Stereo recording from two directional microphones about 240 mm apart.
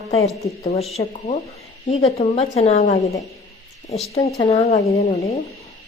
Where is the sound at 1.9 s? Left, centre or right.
Left.